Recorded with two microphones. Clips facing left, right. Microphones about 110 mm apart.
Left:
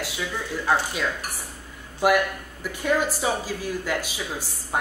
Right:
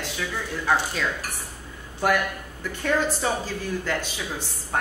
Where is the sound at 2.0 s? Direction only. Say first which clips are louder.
Left 3 dB; 10° left (ahead or behind).